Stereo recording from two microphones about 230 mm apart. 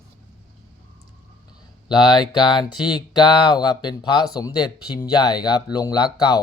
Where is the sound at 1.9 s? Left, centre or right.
Centre.